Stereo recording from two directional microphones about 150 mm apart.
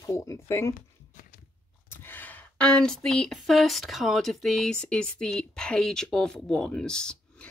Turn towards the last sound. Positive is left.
turn(degrees=5)  # may be behind; listen again after turning